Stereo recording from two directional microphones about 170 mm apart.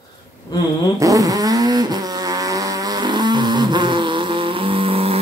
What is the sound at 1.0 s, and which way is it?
Vehicle, 20° right (ahead or behind).